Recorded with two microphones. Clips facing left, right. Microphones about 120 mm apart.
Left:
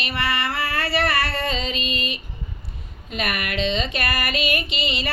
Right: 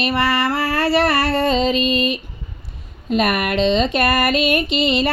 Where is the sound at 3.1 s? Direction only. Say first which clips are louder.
Right 9 dB; 40° right (ahead or behind).